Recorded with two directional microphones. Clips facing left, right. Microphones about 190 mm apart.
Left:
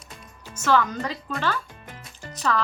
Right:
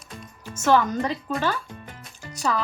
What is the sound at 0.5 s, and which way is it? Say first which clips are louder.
A woman's voice: right 2 dB; 20° right (ahead or behind).